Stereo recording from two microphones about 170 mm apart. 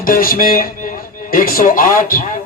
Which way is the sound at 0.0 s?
55° left (ahead or behind).